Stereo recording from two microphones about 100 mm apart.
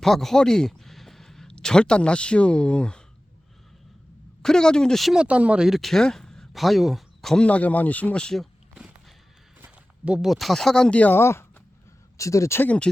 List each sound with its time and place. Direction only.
0.0 s speech: 5° left (ahead or behind)
4.4 s speech: 5° left (ahead or behind)
9.6 s speech: 15° right (ahead or behind); by 12.6 s 30° left (ahead or behind)
12.6 s speech: 10° left (ahead or behind)